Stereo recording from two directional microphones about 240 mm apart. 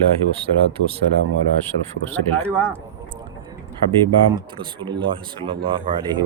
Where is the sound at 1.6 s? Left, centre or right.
Centre.